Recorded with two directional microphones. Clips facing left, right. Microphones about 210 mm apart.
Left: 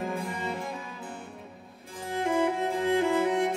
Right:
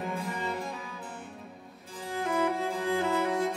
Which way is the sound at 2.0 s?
20° left (ahead or behind).